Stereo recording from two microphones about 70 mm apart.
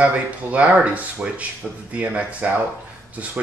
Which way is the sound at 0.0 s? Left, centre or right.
Right.